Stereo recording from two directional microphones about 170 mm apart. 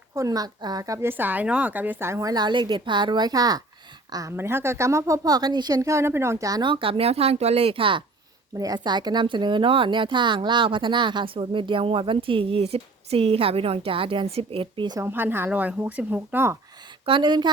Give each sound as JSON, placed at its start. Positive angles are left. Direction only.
{"t": 0.1, "sound": "speech", "side_deg": -20}
{"t": 15.0, "sound": "speech", "side_deg": -10}
{"t": 17.1, "sound": "speech", "side_deg": -30}